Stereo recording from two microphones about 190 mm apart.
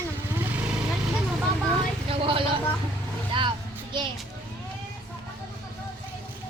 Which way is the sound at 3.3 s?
25° right (ahead or behind).